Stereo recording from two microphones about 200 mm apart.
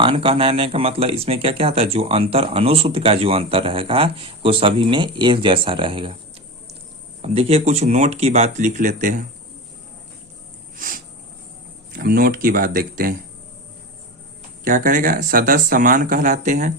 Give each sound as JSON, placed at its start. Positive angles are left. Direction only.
{"t": 0.0, "sound": "speech", "side_deg": -25}
{"t": 7.2, "sound": "speech", "side_deg": -30}
{"t": 10.8, "sound": "a sound", "side_deg": -45}
{"t": 11.9, "sound": "speech", "side_deg": -45}
{"t": 14.6, "sound": "speech", "side_deg": -40}